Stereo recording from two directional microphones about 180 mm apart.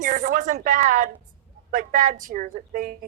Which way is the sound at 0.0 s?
45° right (ahead or behind).